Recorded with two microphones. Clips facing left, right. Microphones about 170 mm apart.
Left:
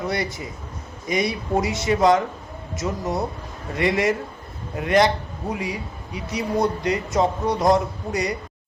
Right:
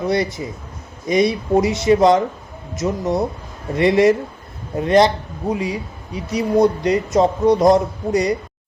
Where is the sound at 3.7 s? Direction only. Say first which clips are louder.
Right 7 dB; 25° right (ahead or behind).